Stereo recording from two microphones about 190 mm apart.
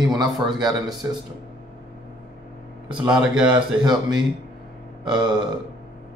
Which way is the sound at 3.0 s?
5° right (ahead or behind).